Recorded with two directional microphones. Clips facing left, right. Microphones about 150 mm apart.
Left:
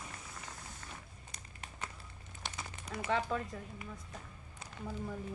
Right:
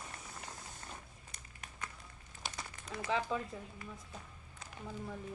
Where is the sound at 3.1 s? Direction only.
Centre (ahead or behind).